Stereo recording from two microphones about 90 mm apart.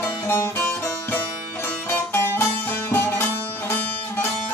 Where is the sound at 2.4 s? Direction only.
25° left (ahead or behind).